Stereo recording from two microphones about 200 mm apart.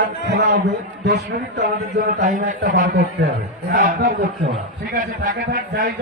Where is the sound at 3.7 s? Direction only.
40° right (ahead or behind).